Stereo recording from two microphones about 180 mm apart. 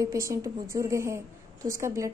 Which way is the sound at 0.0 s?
15° right (ahead or behind).